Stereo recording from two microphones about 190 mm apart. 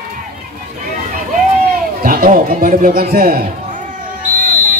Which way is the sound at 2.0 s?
50° right (ahead or behind).